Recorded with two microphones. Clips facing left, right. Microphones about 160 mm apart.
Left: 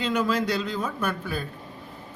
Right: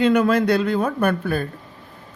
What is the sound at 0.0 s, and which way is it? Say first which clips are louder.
Speech: right 8 dB; 60° right (ahead or behind).